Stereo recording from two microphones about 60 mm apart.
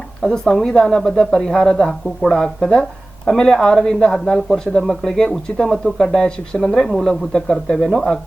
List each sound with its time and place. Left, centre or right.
0.2 s speech: centre